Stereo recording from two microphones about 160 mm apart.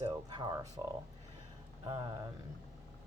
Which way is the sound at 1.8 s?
30° right (ahead or behind).